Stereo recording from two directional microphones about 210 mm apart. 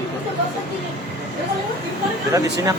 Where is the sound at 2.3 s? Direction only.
15° right (ahead or behind).